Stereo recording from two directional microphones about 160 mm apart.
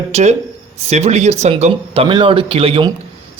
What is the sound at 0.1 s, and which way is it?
Speech, 45° right (ahead or behind).